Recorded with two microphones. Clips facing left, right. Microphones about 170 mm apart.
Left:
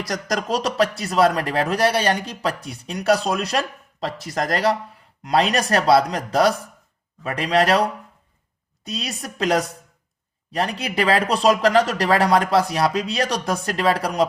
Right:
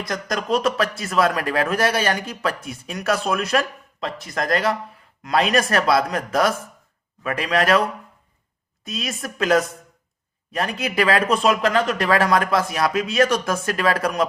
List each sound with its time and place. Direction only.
0.1 s a woman's voice: 40° left (ahead or behind)